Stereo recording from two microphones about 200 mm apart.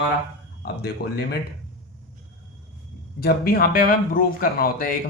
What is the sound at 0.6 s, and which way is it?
Speech, 50° left (ahead or behind).